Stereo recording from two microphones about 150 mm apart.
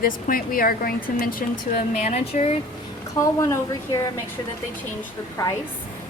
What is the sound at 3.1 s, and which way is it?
Speech, 20° left (ahead or behind).